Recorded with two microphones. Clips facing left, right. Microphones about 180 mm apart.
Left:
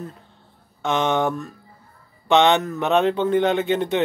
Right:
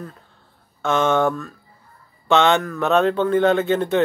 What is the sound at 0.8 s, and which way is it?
A man's voice, 15° left (ahead or behind).